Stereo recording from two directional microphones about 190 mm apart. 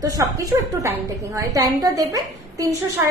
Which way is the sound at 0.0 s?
15° right (ahead or behind).